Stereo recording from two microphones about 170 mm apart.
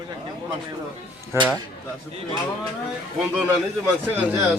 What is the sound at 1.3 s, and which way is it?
Speech, 15° right (ahead or behind).